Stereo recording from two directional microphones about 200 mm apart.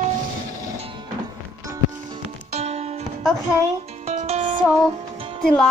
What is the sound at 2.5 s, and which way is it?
Music, 30° right (ahead or behind).